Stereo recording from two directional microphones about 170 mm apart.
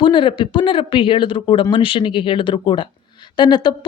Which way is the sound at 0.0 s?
30° left (ahead or behind).